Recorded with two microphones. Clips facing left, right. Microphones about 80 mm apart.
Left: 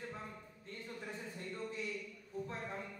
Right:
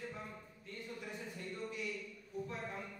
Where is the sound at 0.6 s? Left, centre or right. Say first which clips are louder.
Even; left.